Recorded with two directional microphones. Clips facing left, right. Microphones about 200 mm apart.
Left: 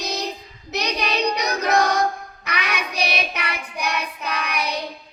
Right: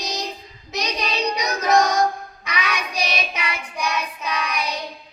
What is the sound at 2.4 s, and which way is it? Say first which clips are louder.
Child singing: even; 60° left (ahead or behind).